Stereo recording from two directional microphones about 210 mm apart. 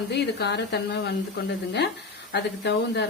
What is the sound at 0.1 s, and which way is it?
Speech, 55° left (ahead or behind).